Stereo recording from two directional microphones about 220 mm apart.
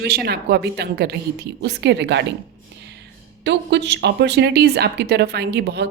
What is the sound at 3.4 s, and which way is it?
A woman's voice, 50° right (ahead or behind).